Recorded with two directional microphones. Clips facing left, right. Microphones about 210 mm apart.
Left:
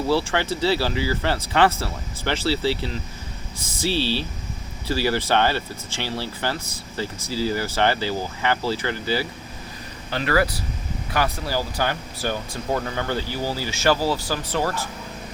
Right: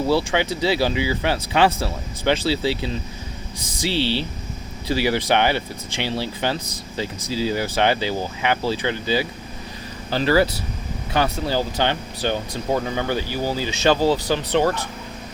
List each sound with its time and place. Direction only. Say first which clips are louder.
0.1 s speech: even; 15° right (ahead or behind)
10.1 s speech: right 4 dB; 30° right (ahead or behind)
12.7 s speech: right 3 dB; 15° right (ahead or behind)